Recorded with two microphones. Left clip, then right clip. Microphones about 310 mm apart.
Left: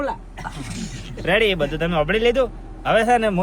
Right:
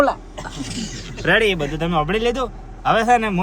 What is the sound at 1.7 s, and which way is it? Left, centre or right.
A man's voice, centre.